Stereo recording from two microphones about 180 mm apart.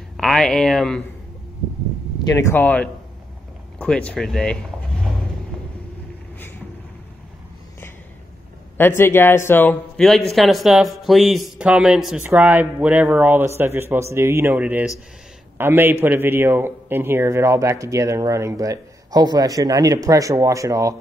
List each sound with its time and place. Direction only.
0.2 s speech: centre (ahead or behind)
2.2 s a man's voice: 15° left (ahead or behind)
8.7 s a man's voice: 10° left (ahead or behind); by 20.9 s 15° right (ahead or behind)